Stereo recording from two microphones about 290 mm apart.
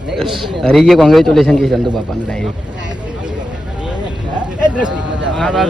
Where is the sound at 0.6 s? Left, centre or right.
Centre.